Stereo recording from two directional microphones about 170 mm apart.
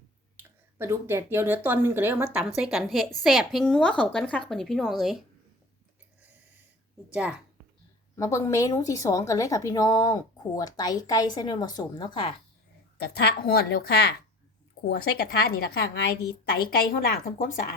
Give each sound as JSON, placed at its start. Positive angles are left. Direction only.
{"t": 0.3, "sound": "a woman's voice", "side_deg": -15}
{"t": 7.1, "sound": "a woman's voice", "side_deg": -10}
{"t": 8.1, "sound": "a woman's voice", "side_deg": 20}
{"t": 13.0, "sound": "a woman's voice", "side_deg": 70}
{"t": 16.8, "sound": "speech", "side_deg": 55}